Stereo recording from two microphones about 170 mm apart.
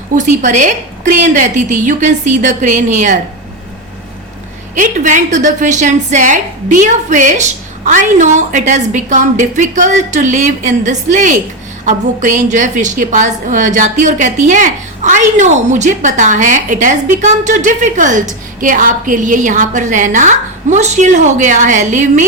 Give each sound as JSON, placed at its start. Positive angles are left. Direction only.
{"t": 0.2, "sound": "a woman's voice", "side_deg": -45}
{"t": 4.7, "sound": "a woman's voice", "side_deg": -50}